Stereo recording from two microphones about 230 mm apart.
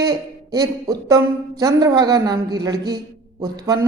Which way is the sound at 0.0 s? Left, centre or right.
Centre.